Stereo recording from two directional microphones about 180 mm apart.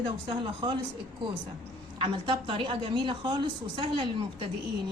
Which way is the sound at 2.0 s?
30° right (ahead or behind).